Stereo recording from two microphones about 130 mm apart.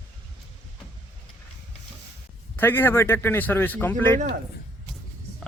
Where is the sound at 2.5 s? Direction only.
15° left (ahead or behind).